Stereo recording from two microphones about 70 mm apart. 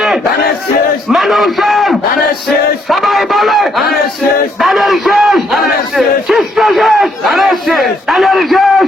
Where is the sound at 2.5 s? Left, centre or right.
Centre.